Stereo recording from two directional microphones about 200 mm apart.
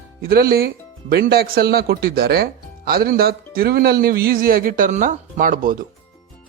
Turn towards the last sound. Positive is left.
turn(degrees=-45)  # may be behind; listen again after turning